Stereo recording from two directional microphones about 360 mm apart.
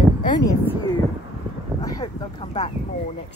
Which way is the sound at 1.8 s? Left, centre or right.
Centre.